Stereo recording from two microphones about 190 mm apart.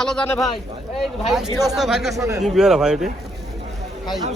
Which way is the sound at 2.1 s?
15° right (ahead or behind).